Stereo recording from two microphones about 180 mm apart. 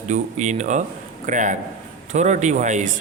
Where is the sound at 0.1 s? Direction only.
40° right (ahead or behind).